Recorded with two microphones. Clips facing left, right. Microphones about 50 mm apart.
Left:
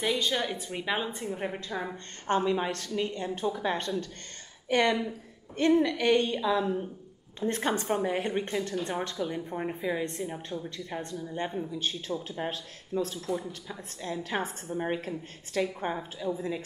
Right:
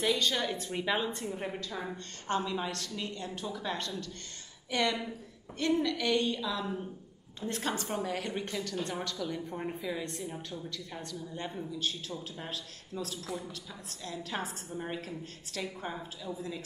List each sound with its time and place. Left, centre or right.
0.0 s a woman's voice: centre